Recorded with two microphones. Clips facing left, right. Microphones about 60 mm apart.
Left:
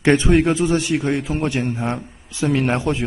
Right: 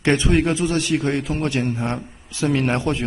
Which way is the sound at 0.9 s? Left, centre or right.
Centre.